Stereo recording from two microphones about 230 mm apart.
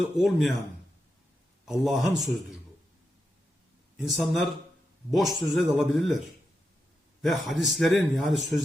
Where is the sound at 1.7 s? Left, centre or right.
Centre.